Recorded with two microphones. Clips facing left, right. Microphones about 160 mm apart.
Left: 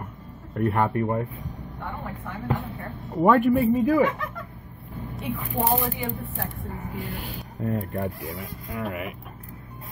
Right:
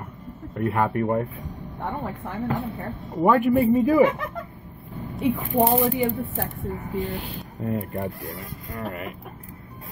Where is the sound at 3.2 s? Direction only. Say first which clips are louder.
Even; 5° right (ahead or behind).